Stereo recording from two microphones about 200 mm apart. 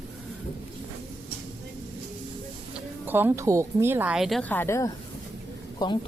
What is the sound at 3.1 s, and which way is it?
A woman's voice, 10° right (ahead or behind).